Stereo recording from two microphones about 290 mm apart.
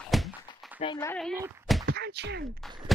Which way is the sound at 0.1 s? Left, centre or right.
Centre.